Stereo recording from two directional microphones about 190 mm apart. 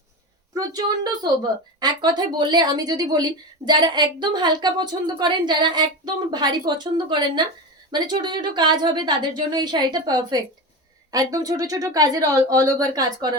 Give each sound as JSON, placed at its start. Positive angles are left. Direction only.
{"t": 1.2, "sound": "a woman's voice", "side_deg": -25}